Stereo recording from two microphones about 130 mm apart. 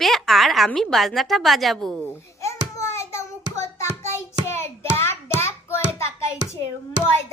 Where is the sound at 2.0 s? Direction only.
20° left (ahead or behind).